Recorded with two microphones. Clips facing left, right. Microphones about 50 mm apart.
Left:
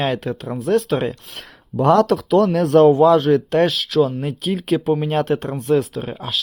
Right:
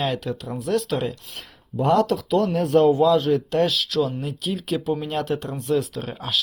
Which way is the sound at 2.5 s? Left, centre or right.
Left.